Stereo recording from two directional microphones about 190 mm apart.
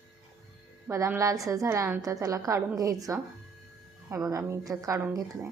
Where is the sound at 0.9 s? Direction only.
15° right (ahead or behind).